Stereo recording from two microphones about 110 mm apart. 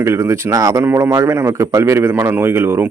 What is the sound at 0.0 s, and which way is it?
A man's voice, 25° right (ahead or behind).